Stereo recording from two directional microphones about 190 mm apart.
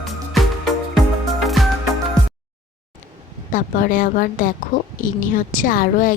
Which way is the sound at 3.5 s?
45° left (ahead or behind).